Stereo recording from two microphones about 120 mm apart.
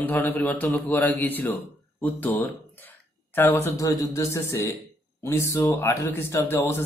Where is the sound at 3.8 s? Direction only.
25° left (ahead or behind).